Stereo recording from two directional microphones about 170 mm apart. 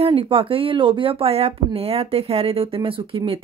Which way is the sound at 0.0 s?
35° right (ahead or behind).